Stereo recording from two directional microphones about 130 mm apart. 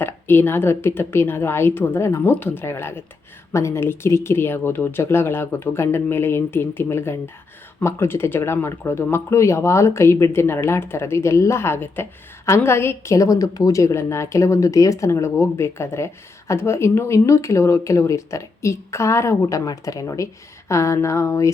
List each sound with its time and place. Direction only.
0.0 s a woman's voice: 15° left (ahead or behind)